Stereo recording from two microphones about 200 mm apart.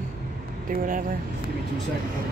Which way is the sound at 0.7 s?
40° right (ahead or behind).